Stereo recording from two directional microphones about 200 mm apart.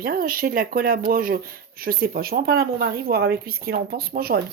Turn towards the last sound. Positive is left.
turn(degrees=-50)  # may be behind; listen again after turning